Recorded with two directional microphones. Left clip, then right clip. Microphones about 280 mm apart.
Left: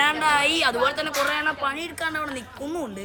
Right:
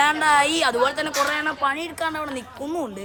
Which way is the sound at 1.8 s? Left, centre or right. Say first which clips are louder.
Right 1 dB; centre.